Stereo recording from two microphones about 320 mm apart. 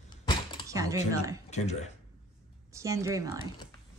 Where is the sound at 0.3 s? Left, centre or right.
Centre.